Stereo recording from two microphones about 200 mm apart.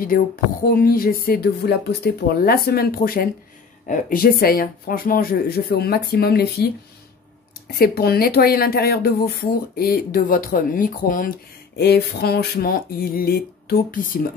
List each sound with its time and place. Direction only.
0.7 s speech: 45° left (ahead or behind)